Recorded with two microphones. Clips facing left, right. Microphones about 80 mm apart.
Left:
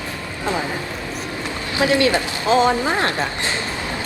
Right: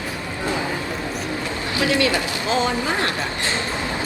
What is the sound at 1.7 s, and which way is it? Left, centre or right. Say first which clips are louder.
Speech: left 3 dB; left.